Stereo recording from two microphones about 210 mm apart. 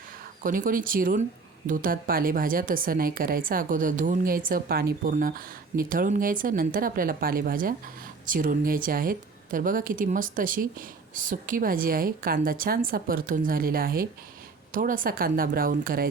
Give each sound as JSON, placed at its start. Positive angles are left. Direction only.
{"t": 0.4, "sound": "a woman's voice", "side_deg": -40}